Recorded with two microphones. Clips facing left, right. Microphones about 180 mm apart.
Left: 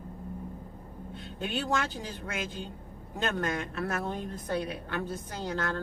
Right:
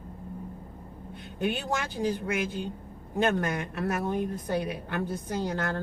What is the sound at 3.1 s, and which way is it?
Speech, 15° right (ahead or behind).